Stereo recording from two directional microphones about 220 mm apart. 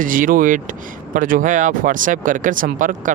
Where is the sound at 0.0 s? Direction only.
40° right (ahead or behind).